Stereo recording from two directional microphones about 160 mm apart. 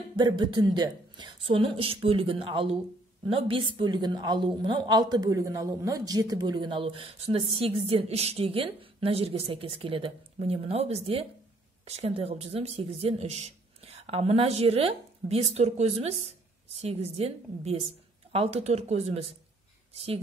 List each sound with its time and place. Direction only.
0.1 s a woman's voice: 30° right (ahead or behind)